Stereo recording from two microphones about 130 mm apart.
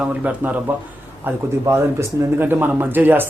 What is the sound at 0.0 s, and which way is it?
Speech, 10° right (ahead or behind).